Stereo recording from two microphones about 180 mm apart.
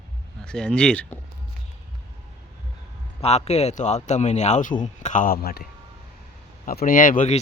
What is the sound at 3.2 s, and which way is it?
A man's voice, 35° left (ahead or behind).